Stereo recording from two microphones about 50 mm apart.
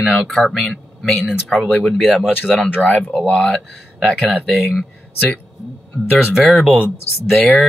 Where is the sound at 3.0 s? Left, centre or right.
Left.